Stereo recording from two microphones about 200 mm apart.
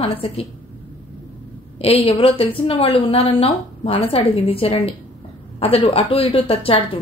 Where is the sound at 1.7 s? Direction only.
30° left (ahead or behind).